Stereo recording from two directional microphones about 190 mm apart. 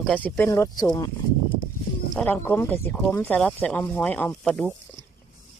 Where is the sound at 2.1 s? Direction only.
10° left (ahead or behind).